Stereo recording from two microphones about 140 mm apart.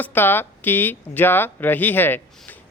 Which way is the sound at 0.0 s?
15° left (ahead or behind).